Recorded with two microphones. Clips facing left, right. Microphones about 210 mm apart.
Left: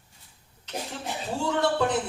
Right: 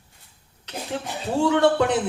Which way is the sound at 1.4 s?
75° right (ahead or behind).